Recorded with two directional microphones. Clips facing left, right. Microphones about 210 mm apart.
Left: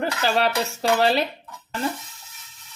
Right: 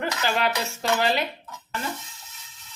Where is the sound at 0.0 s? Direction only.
35° left (ahead or behind).